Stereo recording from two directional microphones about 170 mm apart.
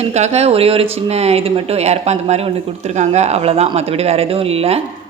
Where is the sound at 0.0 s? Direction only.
40° right (ahead or behind).